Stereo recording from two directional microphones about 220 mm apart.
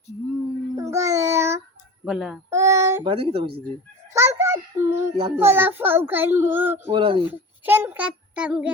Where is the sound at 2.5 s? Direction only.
15° right (ahead or behind).